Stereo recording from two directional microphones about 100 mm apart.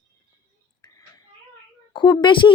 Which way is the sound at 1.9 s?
50° left (ahead or behind).